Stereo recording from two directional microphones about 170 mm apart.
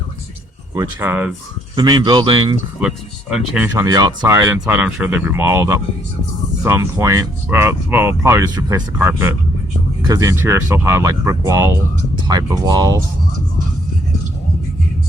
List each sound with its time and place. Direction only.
0.7 s speech: 15° right (ahead or behind)
1.7 s speech: 25° right (ahead or behind)
2.8 s speech: 10° right (ahead or behind)
3.8 s speech: 20° right (ahead or behind)
4.6 s speech: 10° right (ahead or behind)